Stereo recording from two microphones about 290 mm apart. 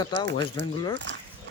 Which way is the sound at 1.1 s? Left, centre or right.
Right.